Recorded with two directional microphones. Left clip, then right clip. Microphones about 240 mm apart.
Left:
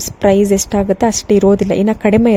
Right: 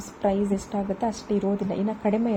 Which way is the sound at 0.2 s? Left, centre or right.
Left.